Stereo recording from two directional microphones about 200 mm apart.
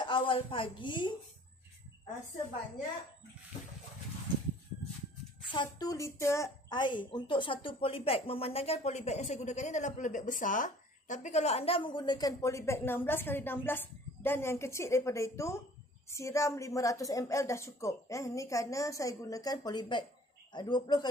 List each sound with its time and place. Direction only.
0.0 s a woman's voice: 25° left (ahead or behind)
5.5 s a woman's voice: 20° left (ahead or behind)